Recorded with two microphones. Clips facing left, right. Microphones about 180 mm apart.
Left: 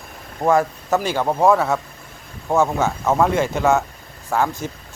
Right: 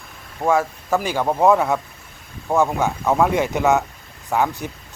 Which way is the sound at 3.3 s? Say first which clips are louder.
Even; 15° right (ahead or behind).